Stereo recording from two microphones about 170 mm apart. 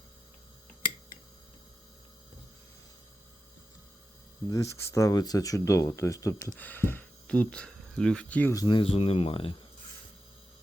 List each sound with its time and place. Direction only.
4.4 s speech: 20° left (ahead or behind)
8.5 s speech: 25° left (ahead or behind)